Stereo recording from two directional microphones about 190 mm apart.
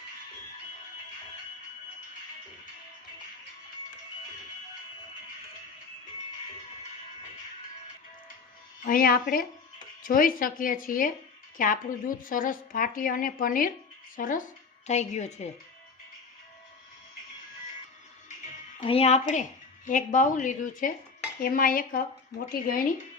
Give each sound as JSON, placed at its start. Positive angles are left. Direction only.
{"t": 8.8, "sound": "a woman's voice", "side_deg": 45}
{"t": 18.8, "sound": "a woman's voice", "side_deg": 30}